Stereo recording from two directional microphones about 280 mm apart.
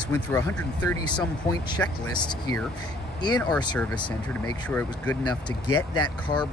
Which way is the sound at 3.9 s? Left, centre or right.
Centre.